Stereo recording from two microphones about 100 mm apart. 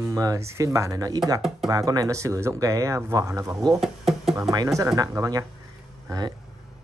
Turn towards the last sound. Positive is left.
turn(degrees=-40)  # may be behind; listen again after turning